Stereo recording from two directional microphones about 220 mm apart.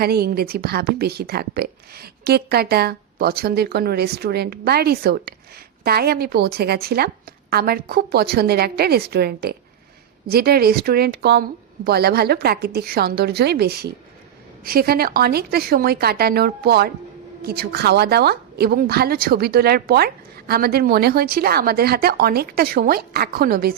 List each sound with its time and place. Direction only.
0.0 s a woman's voice: 45° right (ahead or behind)